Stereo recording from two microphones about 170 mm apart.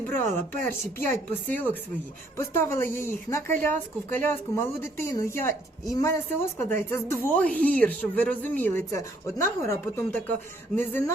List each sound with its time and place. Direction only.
0.2 s a woman's voice: 10° left (ahead or behind)